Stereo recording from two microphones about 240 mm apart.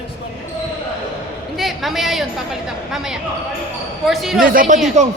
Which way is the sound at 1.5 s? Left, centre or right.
Centre.